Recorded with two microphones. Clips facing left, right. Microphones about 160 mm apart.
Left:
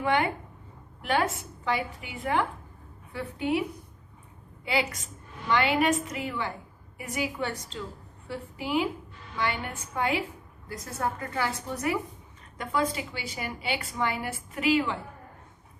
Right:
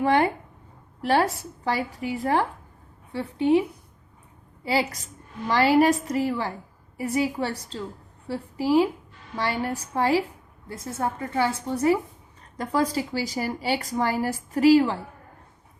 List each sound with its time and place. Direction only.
0.0 s a woman's voice: 35° right (ahead or behind)
4.6 s a woman's voice: 35° right (ahead or behind)